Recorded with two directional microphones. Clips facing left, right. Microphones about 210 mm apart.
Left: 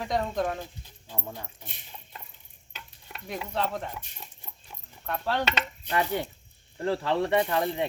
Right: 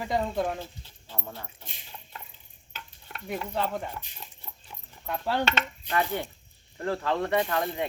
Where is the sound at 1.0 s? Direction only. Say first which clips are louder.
Left 1 dB; 15° left (ahead or behind).